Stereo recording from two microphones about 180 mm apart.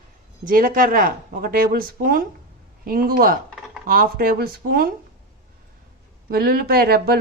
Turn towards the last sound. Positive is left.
turn(degrees=-55)  # may be behind; listen again after turning